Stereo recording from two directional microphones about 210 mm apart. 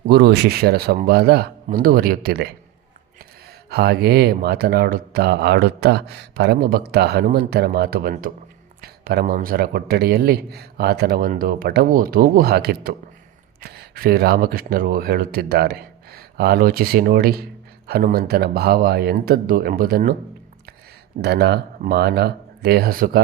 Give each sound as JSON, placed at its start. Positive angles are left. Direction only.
{"t": 0.1, "sound": "speech", "side_deg": -50}
{"t": 3.7, "sound": "speech", "side_deg": -50}
{"t": 21.2, "sound": "speech", "side_deg": -50}